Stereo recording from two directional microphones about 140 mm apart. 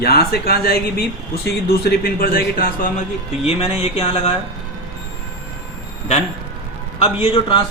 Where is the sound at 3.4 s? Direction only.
45° left (ahead or behind).